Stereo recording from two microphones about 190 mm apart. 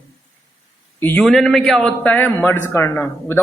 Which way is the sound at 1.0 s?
10° left (ahead or behind).